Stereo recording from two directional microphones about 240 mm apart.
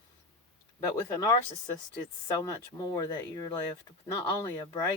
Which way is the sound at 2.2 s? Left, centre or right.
Centre.